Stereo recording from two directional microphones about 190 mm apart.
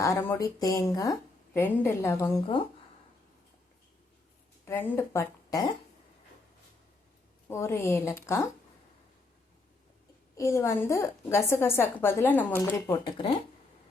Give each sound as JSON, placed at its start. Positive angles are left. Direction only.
{"t": 0.0, "sound": "a woman's voice", "side_deg": 15}
{"t": 4.6, "sound": "a woman's voice", "side_deg": 10}
{"t": 7.4, "sound": "a woman's voice", "side_deg": 15}
{"t": 10.3, "sound": "a woman's voice", "side_deg": 15}